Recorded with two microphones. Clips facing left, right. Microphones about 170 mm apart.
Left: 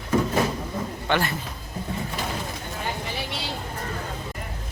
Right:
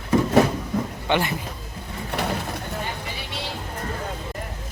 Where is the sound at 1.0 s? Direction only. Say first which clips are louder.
Right 1 dB; 20° right (ahead or behind).